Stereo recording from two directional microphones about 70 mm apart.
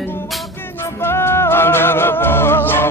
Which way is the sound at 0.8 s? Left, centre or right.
Left.